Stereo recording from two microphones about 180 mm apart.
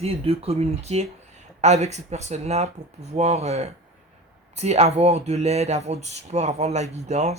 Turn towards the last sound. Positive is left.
turn(degrees=-40)  # may be behind; listen again after turning